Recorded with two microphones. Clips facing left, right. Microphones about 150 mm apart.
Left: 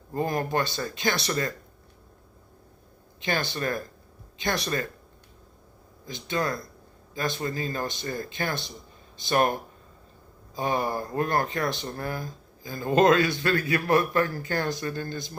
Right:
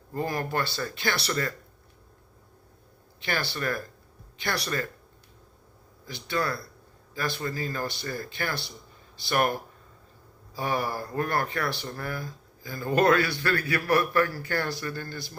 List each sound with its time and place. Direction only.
0.1 s speech: 20° left (ahead or behind)
3.2 s speech: 20° left (ahead or behind)
6.1 s speech: 20° left (ahead or behind)